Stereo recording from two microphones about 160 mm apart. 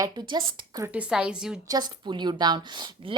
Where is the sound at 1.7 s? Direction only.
25° right (ahead or behind).